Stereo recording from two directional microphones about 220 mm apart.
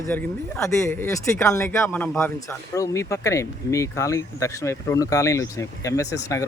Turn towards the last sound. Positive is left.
turn(degrees=15)  # may be behind; listen again after turning